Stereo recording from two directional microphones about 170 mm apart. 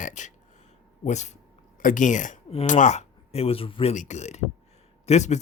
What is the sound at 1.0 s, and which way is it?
Speech, 40° left (ahead or behind).